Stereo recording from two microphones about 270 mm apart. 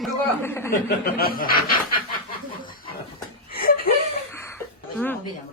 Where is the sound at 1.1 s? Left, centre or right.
Left.